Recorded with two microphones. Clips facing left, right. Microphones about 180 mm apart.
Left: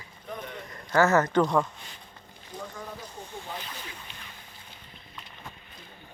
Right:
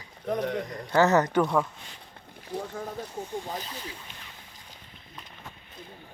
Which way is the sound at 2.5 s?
65° right (ahead or behind).